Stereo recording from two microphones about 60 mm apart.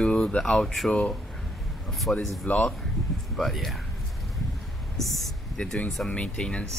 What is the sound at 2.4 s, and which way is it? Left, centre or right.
Speech, left.